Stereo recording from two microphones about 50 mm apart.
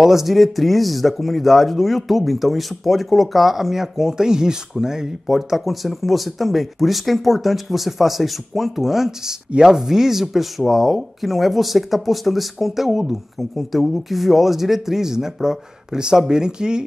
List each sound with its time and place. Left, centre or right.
0.0 s speech: centre